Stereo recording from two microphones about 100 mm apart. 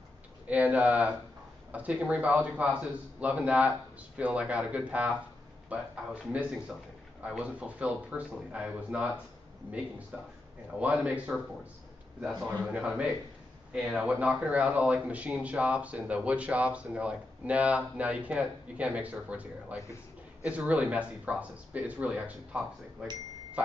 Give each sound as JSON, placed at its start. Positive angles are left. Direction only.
{"t": 0.5, "sound": "speech", "side_deg": -15}
{"t": 10.1, "sound": "speech", "side_deg": -10}
{"t": 12.4, "sound": "speech", "side_deg": -10}